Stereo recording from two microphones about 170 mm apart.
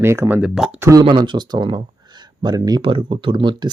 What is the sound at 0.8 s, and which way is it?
Speech, 20° right (ahead or behind).